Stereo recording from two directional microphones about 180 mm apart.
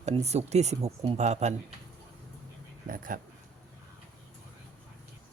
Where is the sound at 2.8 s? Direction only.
50° right (ahead or behind).